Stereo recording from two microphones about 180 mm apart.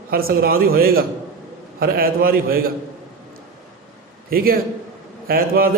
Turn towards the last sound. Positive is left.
turn(degrees=-55)  # may be behind; listen again after turning